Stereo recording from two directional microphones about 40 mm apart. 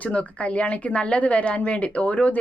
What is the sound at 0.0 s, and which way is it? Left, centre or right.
Speech, left.